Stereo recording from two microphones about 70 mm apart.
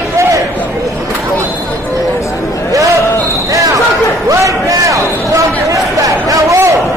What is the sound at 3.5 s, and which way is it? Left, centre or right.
Basketball bounce, right.